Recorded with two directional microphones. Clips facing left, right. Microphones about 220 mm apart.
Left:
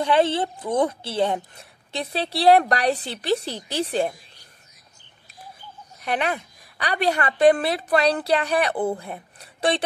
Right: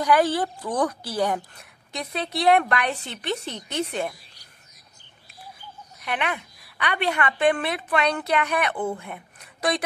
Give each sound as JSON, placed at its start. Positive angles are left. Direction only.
{"t": 0.0, "sound": "a woman's voice", "side_deg": 25}
{"t": 5.9, "sound": "a woman's voice", "side_deg": 35}